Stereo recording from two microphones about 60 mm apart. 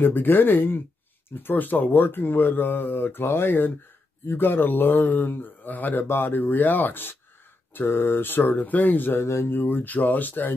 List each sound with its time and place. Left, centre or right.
0.0 s speech: left
9.2 s speech: left